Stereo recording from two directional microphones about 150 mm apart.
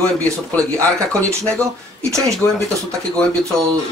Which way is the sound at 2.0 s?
20° right (ahead or behind).